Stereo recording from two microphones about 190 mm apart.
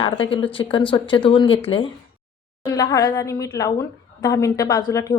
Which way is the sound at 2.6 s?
20° left (ahead or behind).